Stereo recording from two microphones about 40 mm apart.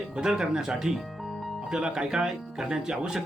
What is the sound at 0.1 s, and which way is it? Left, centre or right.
Speech, centre.